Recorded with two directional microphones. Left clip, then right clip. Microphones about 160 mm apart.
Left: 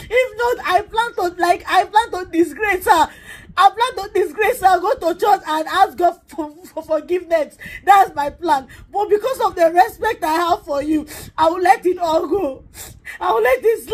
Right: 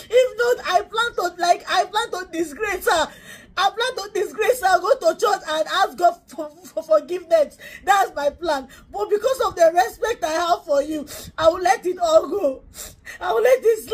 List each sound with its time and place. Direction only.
0.1 s a woman's voice: 15° left (ahead or behind)